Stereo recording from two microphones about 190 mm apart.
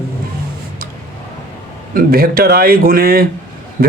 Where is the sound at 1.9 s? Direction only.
50° right (ahead or behind).